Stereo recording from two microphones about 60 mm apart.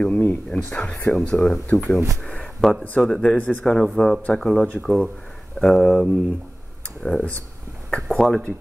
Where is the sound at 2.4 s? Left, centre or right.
Centre.